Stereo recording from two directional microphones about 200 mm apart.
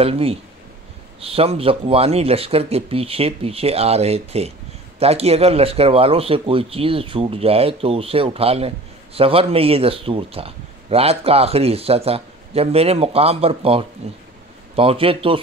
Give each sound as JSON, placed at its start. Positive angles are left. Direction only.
{"t": 0.0, "sound": "a man's voice", "side_deg": -30}